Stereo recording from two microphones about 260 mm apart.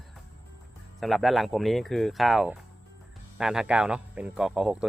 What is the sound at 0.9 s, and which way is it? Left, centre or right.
Speech, centre.